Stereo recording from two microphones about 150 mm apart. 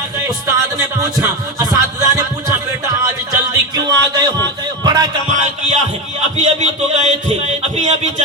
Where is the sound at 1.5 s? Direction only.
20° right (ahead or behind).